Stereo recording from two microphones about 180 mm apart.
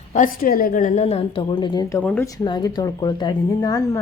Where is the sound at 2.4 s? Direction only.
25° left (ahead or behind).